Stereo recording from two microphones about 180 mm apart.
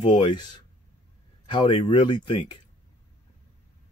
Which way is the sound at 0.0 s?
25° left (ahead or behind).